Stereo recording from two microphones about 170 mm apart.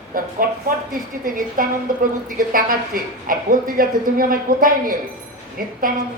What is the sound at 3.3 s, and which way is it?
A man's voice, 55° right (ahead or behind).